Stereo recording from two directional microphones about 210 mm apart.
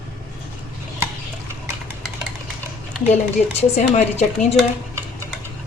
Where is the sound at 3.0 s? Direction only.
30° left (ahead or behind).